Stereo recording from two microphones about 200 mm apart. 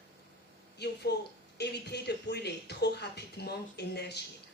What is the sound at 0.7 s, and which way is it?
A woman's voice, 55° left (ahead or behind).